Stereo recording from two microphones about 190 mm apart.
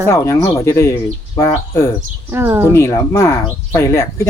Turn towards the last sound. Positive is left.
turn(degrees=15)  # may be behind; listen again after turning